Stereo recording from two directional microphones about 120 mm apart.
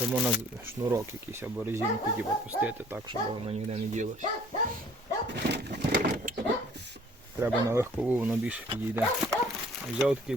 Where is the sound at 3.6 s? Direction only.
80° right.